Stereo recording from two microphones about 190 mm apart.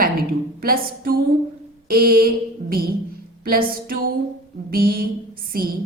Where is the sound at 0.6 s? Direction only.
50° right (ahead or behind).